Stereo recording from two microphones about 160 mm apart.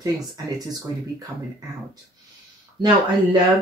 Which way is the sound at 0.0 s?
20° right (ahead or behind).